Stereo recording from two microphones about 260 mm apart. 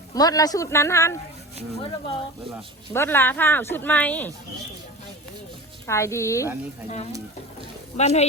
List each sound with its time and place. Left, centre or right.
0.1 s speech: centre
2.9 s speech: centre
5.8 s speech: centre
7.9 s speech: left